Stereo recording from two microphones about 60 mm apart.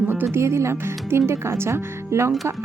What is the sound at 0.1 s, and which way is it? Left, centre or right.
Speech, right.